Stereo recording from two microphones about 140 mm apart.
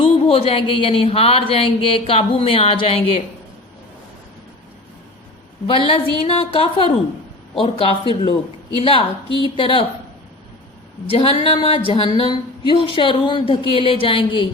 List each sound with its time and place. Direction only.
0.0 s speech: 40° left (ahead or behind)
5.6 s speech: 40° left (ahead or behind)
11.1 s speech: 40° left (ahead or behind)